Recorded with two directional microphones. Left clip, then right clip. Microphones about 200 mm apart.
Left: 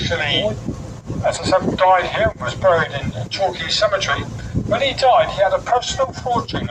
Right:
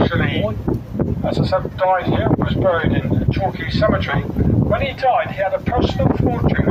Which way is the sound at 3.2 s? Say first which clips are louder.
Left 2 dB; 40° left (ahead or behind).